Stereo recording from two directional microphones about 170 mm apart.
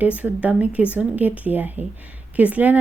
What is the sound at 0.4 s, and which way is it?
Speech, 10° right (ahead or behind).